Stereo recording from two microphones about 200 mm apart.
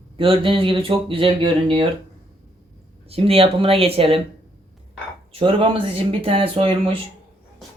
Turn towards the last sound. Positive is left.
turn(degrees=-25)  # may be behind; listen again after turning